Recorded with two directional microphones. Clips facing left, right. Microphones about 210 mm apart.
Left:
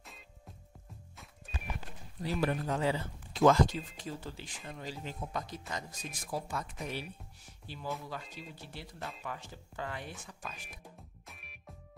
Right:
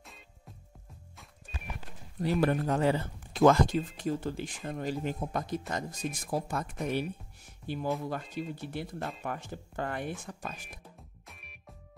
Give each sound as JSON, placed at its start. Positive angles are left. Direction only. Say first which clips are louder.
{"t": 2.4, "sound": "speech", "louder": "right 4 dB", "side_deg": -50}
{"t": 11.2, "sound": "music", "louder": "right 1 dB", "side_deg": 0}